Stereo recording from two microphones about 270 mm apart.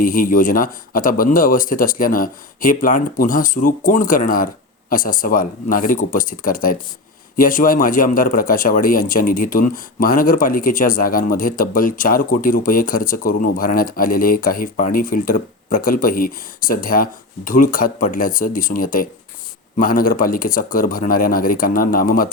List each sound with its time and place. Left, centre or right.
0.0 s a man's voice: left